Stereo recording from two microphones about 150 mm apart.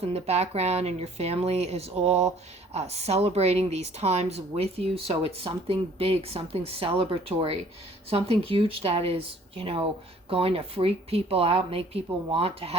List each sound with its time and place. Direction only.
0.0 s a woman's voice: 45° right (ahead or behind)